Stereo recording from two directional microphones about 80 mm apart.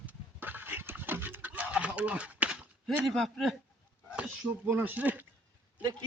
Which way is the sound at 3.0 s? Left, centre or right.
Centre.